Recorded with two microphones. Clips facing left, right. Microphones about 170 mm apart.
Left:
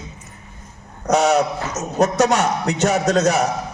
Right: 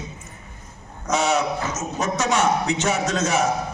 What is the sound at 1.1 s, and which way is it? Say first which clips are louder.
A man's voice: left 5 dB; 45° left (ahead or behind).